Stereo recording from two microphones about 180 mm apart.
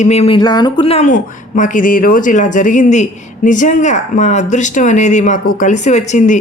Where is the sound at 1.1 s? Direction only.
45° left (ahead or behind).